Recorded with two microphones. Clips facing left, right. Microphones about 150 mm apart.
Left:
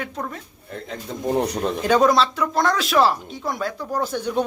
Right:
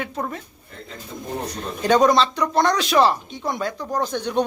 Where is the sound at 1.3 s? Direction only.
70° left (ahead or behind).